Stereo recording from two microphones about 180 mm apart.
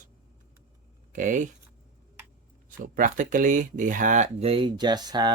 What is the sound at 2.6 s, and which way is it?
Speech, 50° right (ahead or behind).